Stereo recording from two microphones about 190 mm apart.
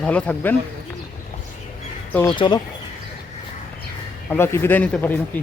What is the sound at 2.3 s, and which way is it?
Speech, 25° left (ahead or behind).